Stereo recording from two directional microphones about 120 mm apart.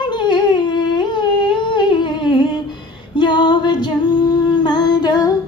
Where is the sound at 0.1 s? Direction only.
40° left (ahead or behind).